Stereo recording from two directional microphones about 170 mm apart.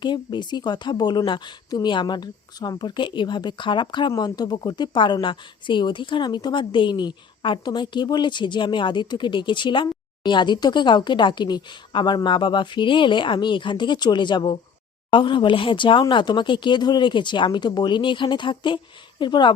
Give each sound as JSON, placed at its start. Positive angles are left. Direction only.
{"t": 0.0, "sound": "a woman's voice", "side_deg": 25}